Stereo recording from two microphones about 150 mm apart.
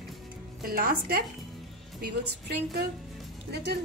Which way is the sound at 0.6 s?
80° right.